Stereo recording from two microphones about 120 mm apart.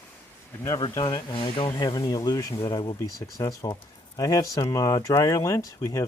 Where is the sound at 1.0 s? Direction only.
35° left (ahead or behind).